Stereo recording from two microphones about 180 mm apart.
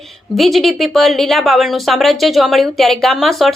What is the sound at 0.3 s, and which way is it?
Speech, centre (ahead or behind).